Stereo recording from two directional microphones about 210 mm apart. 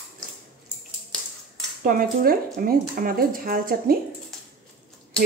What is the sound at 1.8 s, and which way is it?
Speech, 40° right (ahead or behind).